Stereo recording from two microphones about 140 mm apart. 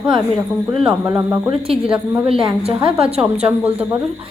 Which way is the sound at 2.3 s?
40° right (ahead or behind).